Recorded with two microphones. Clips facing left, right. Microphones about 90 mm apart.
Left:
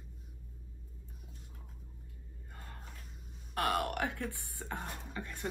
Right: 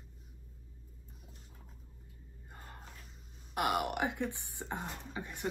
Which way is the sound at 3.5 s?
15° right (ahead or behind).